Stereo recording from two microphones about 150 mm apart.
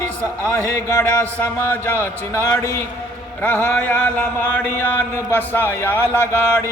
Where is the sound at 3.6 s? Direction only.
10° left (ahead or behind).